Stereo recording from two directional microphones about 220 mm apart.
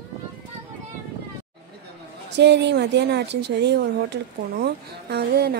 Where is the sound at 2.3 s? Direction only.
50° right (ahead or behind).